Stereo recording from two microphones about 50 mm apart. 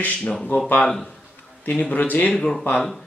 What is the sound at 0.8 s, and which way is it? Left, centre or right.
Speech, centre.